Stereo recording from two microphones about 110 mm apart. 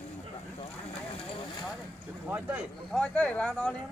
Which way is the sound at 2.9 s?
10° left (ahead or behind).